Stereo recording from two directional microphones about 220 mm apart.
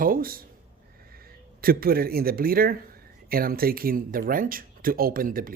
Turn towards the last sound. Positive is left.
turn(degrees=-40)  # may be behind; listen again after turning